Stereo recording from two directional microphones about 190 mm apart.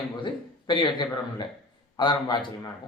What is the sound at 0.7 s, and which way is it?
A man's voice, 25° left (ahead or behind).